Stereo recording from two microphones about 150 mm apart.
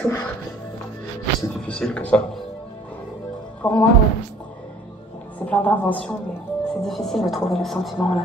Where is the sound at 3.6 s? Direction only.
10° left (ahead or behind).